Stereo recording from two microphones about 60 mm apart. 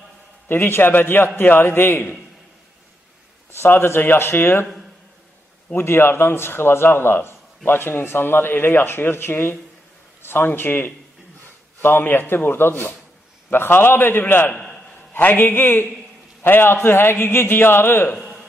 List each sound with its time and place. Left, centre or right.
0.5 s a man's voice: left
3.8 s a man's voice: left
5.8 s a man's voice: left
14.5 s a sound: centre
15.1 s a man's voice: left